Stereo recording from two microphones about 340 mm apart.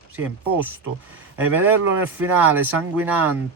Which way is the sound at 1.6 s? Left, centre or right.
Centre.